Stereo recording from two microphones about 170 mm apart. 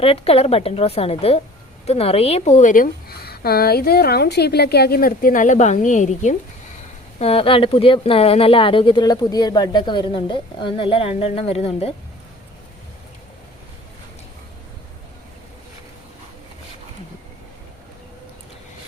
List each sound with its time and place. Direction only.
0.0 s a woman's voice: 35° left (ahead or behind)
7.2 s speech: 35° left (ahead or behind)